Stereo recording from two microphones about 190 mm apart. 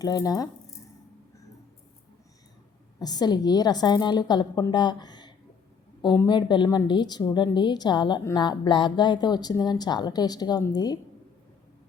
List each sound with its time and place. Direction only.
0.0 s a woman's voice: 20° left (ahead or behind)
3.0 s a woman's voice: 20° left (ahead or behind)